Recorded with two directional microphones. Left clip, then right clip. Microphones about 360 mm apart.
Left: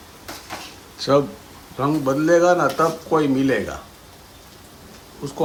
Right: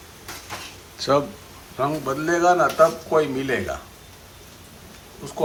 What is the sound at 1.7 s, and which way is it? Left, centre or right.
A man's voice, centre.